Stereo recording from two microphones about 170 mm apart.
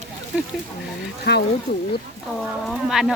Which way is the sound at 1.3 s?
70° left (ahead or behind).